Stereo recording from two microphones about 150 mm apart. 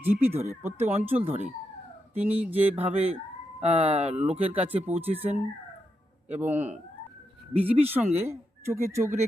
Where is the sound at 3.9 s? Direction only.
45° right (ahead or behind).